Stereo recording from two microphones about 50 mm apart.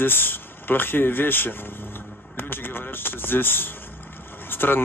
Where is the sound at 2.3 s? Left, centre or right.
Left.